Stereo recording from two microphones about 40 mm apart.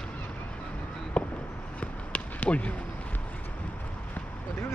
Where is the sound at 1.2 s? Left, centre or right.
Left.